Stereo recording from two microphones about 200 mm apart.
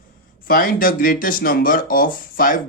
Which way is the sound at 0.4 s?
45° left (ahead or behind).